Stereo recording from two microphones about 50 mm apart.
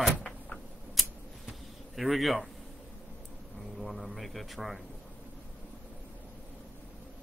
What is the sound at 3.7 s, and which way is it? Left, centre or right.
Speech, centre.